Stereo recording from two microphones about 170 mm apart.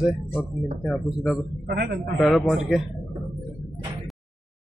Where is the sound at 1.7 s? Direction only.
60° right (ahead or behind).